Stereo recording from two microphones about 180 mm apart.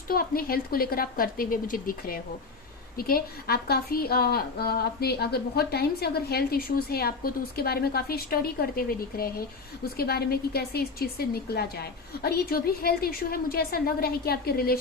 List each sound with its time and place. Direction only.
0.1 s a woman's voice: 55° left (ahead or behind)